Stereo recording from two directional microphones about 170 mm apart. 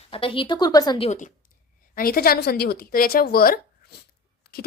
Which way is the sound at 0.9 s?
40° left (ahead or behind).